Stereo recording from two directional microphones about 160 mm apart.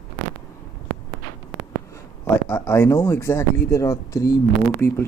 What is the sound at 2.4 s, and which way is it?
Speech, 15° left (ahead or behind).